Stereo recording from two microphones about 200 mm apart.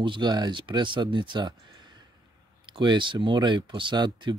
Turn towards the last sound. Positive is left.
turn(degrees=-25)  # may be behind; listen again after turning